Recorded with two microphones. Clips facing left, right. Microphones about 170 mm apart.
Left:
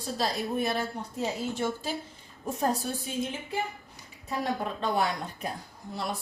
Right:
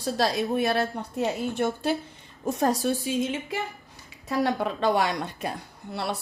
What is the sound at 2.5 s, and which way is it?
A woman's voice, 80° right.